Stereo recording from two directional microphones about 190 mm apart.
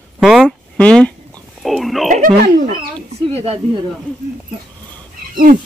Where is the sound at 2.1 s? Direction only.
45° right (ahead or behind).